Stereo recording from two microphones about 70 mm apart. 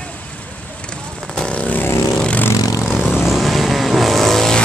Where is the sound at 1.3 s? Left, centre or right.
Centre.